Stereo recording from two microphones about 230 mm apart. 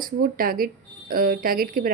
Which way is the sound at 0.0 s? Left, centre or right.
Right.